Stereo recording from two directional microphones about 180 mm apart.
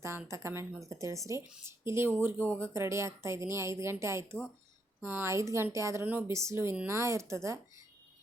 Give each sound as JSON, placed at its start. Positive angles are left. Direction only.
{"t": 0.0, "sound": "speech", "side_deg": -15}